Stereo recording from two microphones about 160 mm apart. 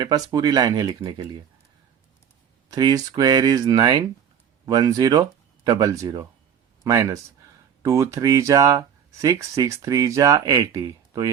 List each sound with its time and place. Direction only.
0.0 s speech: 25° right (ahead or behind)
2.6 s speech: 25° right (ahead or behind)